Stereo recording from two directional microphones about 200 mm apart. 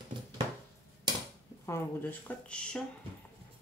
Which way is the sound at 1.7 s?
10° left (ahead or behind).